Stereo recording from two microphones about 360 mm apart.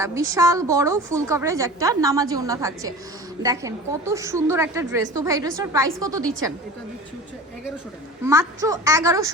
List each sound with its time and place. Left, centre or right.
0.0 s a woman's voice: centre
8.2 s a woman's voice: centre